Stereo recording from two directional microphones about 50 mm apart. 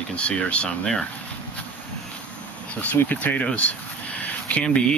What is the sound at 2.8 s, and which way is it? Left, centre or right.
Speech, left.